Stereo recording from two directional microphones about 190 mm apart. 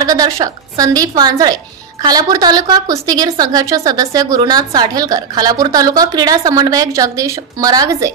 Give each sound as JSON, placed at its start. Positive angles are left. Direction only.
{"t": 0.0, "sound": "a woman's voice", "side_deg": -20}